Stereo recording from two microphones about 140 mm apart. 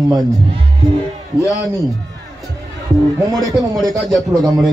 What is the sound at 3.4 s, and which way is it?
Speech, 30° right (ahead or behind).